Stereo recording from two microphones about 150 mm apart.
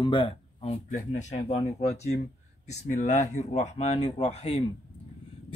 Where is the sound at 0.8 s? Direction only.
55° left (ahead or behind).